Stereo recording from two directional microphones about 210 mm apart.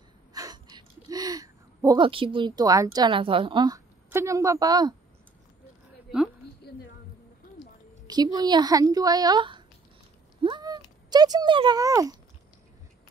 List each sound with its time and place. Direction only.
0.3 s gasp: 20° right (ahead or behind)
8.1 s a woman's voice: 20° right (ahead or behind)